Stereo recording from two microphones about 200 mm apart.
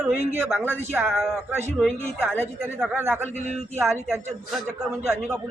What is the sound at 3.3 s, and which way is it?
Speech, 35° right (ahead or behind).